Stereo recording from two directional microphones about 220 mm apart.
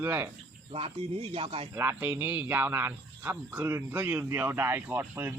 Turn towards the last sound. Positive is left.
turn(degrees=-10)  # may be behind; listen again after turning